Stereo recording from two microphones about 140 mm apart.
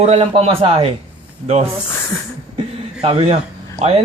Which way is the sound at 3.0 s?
45° right (ahead or behind).